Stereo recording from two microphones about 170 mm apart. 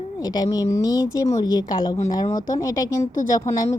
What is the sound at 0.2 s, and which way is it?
Speech, 20° left (ahead or behind).